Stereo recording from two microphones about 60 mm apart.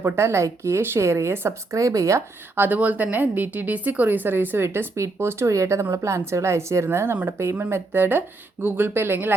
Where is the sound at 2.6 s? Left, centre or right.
Right.